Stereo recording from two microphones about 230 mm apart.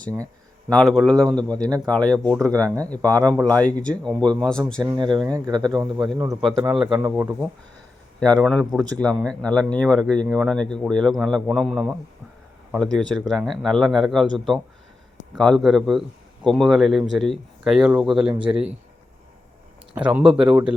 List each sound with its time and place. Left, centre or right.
0.7 s a man's voice: centre
1.6 s speech: centre
1.9 s a man's voice: centre
2.4 s speech: centre
3.6 s a man's voice: centre
4.8 s a man's voice: centre
8.2 s a man's voice: centre
19.9 s a man's voice: centre